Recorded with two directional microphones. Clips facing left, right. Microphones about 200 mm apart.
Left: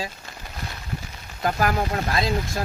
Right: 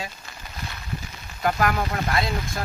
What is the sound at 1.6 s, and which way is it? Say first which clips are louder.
Speech: left 1 dB; 30° left (ahead or behind).